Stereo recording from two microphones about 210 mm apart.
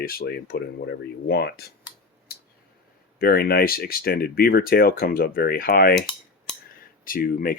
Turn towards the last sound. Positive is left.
turn(degrees=40)  # may be behind; listen again after turning